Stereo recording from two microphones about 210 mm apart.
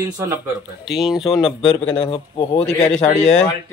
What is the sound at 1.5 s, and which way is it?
A man's voice, 25° left (ahead or behind).